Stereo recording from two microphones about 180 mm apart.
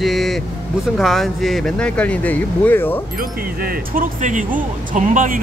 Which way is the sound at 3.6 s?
50° right (ahead or behind).